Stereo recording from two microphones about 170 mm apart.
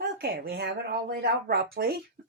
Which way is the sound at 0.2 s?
70° right (ahead or behind).